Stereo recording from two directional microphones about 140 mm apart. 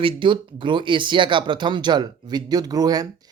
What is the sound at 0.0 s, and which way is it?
Speech, 35° right (ahead or behind).